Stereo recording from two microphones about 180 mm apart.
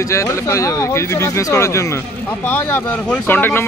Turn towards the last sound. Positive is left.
turn(degrees=10)  # may be behind; listen again after turning